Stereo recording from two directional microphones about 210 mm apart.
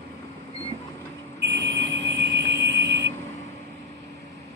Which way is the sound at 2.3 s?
60° right (ahead or behind).